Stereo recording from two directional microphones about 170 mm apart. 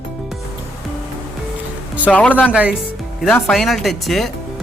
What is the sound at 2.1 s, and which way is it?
Speech, 10° left (ahead or behind).